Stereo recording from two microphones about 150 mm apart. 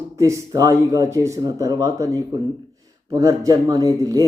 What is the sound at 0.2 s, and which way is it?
Speech, 20° right (ahead or behind).